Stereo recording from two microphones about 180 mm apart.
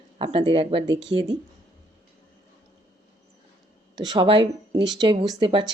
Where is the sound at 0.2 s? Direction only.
30° right (ahead or behind).